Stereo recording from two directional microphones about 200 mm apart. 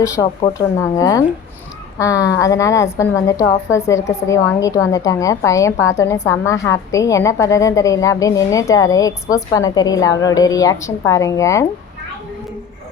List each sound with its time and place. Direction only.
0.0 s a woman's voice: 15° left (ahead or behind)